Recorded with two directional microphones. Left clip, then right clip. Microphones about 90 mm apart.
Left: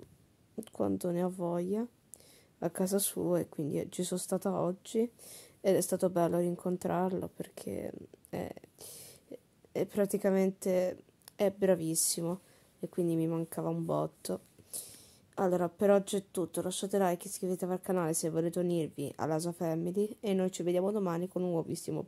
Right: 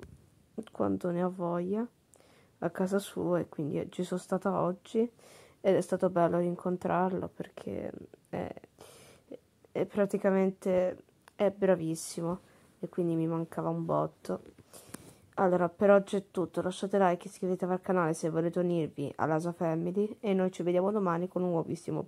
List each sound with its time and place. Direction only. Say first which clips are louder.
0.6 s speech: right 2 dB; 35° left (ahead or behind)
15.3 s a woman's voice: right 3 dB; 10° left (ahead or behind)